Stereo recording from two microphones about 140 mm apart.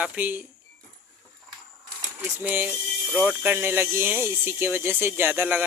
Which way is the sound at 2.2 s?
15° right (ahead or behind).